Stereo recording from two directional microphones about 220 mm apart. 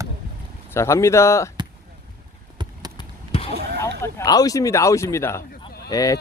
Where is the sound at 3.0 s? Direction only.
25° left (ahead or behind).